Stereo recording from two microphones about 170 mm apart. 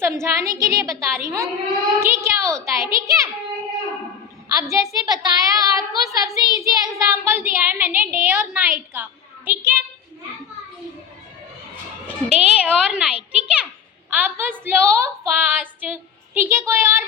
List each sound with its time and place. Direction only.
0.0 s a woman's voice: 15° right (ahead or behind)
4.7 s a woman's voice: 20° right (ahead or behind)
12.0 s a child's voice: 5° right (ahead or behind)